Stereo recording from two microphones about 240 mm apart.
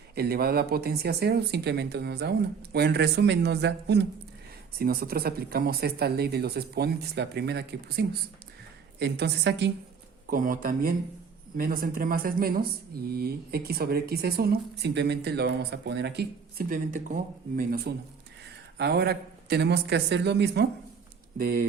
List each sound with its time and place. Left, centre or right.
0.1 s speech: right